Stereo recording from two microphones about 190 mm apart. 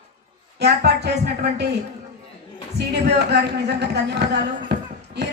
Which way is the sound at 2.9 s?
60° right (ahead or behind).